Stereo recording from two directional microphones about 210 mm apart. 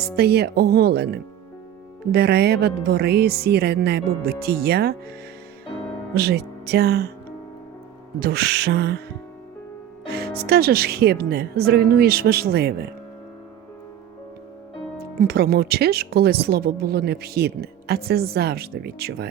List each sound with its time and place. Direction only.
0.2 s speech: 50° right (ahead or behind)
6.1 s speech: 50° right (ahead or behind)
8.2 s speech: 50° right (ahead or behind)
10.1 s speech: 50° right (ahead or behind)
15.2 s speech: 45° right (ahead or behind)